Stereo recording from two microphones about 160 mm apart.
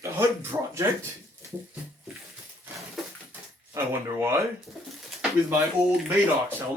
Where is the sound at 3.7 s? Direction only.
15° right (ahead or behind).